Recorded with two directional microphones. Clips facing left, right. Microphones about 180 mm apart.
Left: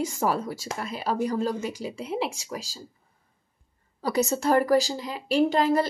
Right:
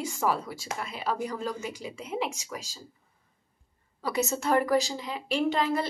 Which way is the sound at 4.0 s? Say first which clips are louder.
Left 4 dB; 35° left (ahead or behind).